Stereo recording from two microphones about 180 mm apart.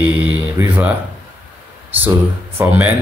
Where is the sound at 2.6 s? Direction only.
10° right (ahead or behind).